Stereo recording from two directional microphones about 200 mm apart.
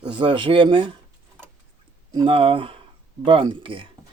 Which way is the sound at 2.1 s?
25° right (ahead or behind).